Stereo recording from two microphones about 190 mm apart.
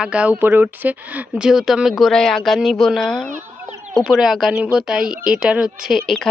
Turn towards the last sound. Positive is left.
turn(degrees=0)  # may be behind; listen again after turning